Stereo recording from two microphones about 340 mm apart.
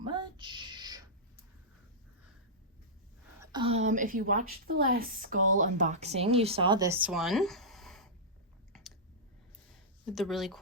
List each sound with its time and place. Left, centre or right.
0.0 s a sound: centre
3.4 s a woman's voice: centre
10.1 s speech: centre